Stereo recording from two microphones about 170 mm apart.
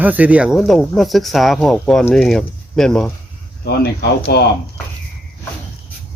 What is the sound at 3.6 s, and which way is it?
Speech, 75° left (ahead or behind).